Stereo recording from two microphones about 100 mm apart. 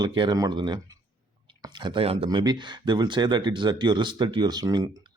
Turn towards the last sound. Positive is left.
turn(degrees=-40)  # may be behind; listen again after turning